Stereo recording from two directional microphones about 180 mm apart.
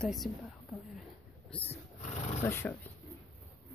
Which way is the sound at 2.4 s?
15° left (ahead or behind).